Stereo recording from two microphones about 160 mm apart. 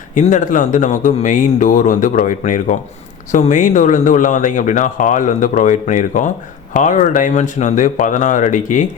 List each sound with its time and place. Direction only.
0.1 s speech: 50° left (ahead or behind)